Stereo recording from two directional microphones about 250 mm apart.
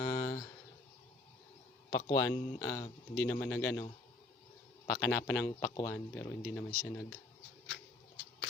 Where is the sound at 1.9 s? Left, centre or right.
Centre.